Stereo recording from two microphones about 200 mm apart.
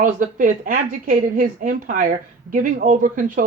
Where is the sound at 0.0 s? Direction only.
40° right (ahead or behind).